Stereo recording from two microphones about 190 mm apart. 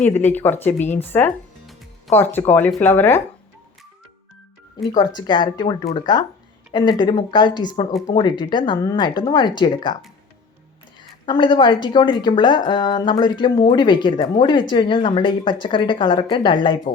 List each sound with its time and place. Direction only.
0.1 s speech: 10° left (ahead or behind)
4.9 s speech: 20° left (ahead or behind)
11.3 s speech: 25° left (ahead or behind)